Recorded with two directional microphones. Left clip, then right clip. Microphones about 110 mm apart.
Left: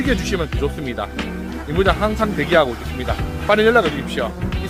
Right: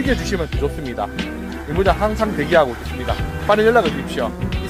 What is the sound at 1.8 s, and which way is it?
Speech, 15° left (ahead or behind).